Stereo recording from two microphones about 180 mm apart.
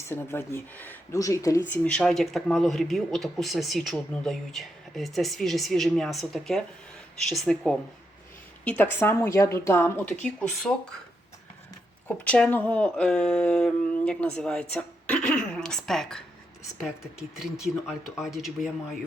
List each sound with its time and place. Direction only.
0.1 s a woman's voice: 15° left (ahead or behind)
12.0 s speech: 10° left (ahead or behind)